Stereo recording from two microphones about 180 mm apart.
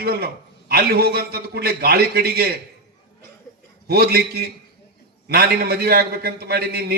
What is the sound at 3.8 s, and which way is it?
A man's voice, 60° right (ahead or behind).